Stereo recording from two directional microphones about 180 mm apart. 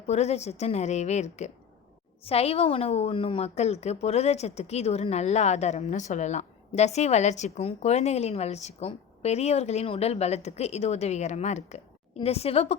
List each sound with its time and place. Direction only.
0.1 s a woman's voice: 35° left (ahead or behind)